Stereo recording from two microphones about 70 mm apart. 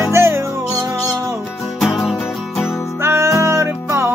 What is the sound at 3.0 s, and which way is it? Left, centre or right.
Music, right.